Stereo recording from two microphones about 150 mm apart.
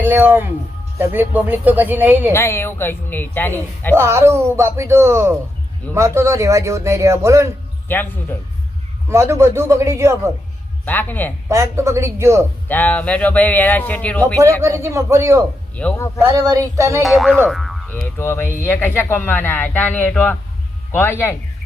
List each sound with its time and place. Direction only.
0.0 s speech: 15° right (ahead or behind)
2.3 s speech: 15° left (ahead or behind)
3.9 s a man's voice: 15° right (ahead or behind)
7.9 s speech: 15° left (ahead or behind)
9.0 s speech: 15° right (ahead or behind)
10.8 s speech: 10° left (ahead or behind)
11.4 s a man's voice: 20° right (ahead or behind)
12.6 s speech: 10° left (ahead or behind)
14.6 s speech: 20° right (ahead or behind)
15.7 s speech: 10° left (ahead or behind)
16.3 s a man's voice: 25° right (ahead or behind)
17.0 s speech: centre (ahead or behind)
17.5 s boing: centre (ahead or behind)
17.8 s speech: 15° left (ahead or behind)